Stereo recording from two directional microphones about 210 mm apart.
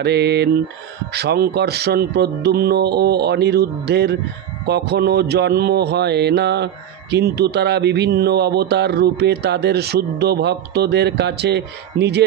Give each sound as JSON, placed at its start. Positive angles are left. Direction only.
{"t": 0.0, "sound": "speech", "side_deg": -50}